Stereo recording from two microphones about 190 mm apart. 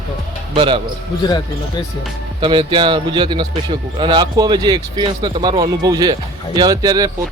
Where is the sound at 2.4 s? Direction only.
25° right (ahead or behind).